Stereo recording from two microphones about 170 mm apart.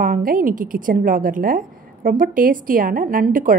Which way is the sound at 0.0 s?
55° right (ahead or behind).